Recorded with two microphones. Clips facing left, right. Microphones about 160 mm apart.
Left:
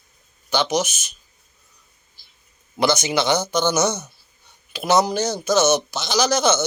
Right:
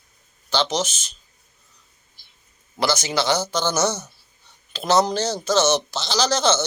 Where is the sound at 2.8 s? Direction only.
20° left (ahead or behind).